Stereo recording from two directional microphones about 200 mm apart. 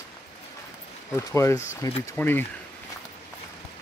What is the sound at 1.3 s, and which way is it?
Speech, 15° left (ahead or behind).